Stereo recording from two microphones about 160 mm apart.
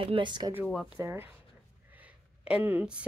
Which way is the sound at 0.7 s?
Centre (ahead or behind).